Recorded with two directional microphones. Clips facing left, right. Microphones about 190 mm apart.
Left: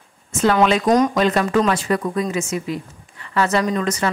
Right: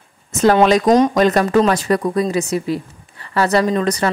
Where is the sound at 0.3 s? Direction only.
40° right (ahead or behind).